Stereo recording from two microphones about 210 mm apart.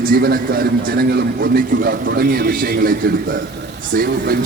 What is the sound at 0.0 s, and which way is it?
A man's voice, 45° right (ahead or behind).